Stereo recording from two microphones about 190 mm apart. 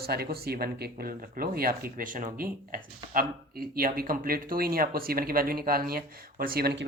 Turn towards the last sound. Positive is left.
turn(degrees=-60)  # may be behind; listen again after turning